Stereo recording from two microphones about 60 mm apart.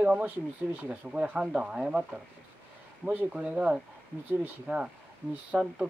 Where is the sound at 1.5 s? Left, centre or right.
Centre.